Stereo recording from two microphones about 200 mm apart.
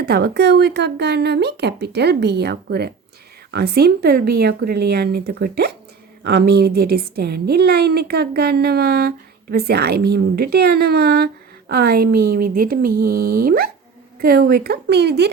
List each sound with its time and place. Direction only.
0.0 s a woman's voice: 50° right (ahead or behind)